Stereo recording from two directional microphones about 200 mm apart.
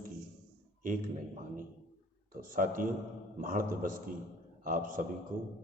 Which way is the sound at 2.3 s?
45° right (ahead or behind).